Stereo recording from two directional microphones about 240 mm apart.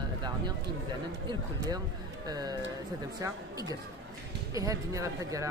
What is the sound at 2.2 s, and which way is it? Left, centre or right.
Speech, centre.